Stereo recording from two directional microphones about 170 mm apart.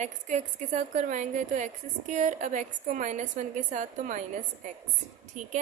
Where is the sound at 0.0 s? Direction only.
45° right (ahead or behind).